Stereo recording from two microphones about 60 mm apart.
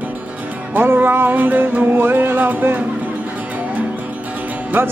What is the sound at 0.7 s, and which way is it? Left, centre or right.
Music, right.